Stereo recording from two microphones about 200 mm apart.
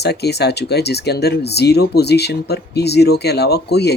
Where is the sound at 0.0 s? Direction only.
55° left (ahead or behind).